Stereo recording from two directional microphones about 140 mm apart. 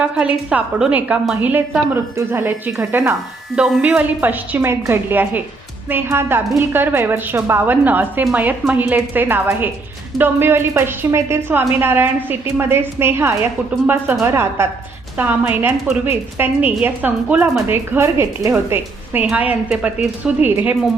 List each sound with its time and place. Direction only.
0.0 s a woman's voice: 10° right (ahead or behind)